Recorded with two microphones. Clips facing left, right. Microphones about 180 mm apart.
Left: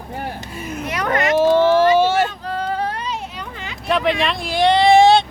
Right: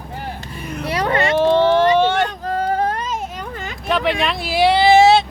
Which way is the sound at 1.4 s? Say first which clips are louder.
Left 1 dB; 5° left (ahead or behind).